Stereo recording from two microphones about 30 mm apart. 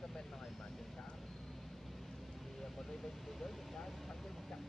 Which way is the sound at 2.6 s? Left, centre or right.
Centre.